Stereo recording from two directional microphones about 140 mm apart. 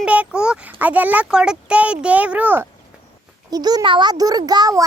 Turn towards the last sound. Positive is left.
turn(degrees=-25)  # may be behind; listen again after turning